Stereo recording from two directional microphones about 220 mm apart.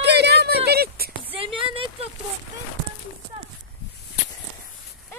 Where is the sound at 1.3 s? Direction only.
25° right (ahead or behind).